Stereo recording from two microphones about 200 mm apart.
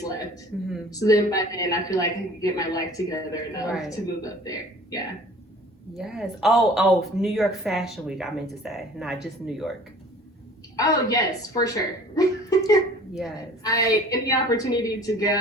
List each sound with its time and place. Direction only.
0.9 s a woman's voice: 15° left (ahead or behind)
6.0 s speech: centre (ahead or behind)
10.8 s a woman's voice: 20° left (ahead or behind)